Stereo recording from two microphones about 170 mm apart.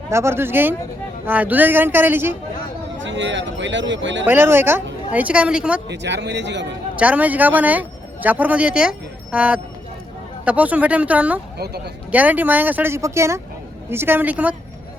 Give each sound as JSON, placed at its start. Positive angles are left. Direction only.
{"t": 0.1, "sound": "speech", "side_deg": -15}
{"t": 3.0, "sound": "speech", "side_deg": -90}
{"t": 4.3, "sound": "speech", "side_deg": -15}
{"t": 5.9, "sound": "speech", "side_deg": -90}
{"t": 6.9, "sound": "speech", "side_deg": -10}
{"t": 11.5, "sound": "speech", "side_deg": -70}
{"t": 12.1, "sound": "speech", "side_deg": -10}